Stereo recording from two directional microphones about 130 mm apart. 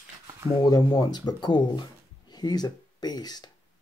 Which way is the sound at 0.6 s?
30° left (ahead or behind).